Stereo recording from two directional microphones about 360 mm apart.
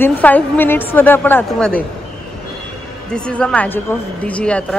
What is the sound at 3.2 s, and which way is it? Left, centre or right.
A woman's voice, centre.